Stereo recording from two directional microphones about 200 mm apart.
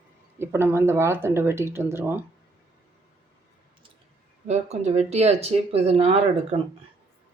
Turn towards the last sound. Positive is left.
turn(degrees=-30)  # may be behind; listen again after turning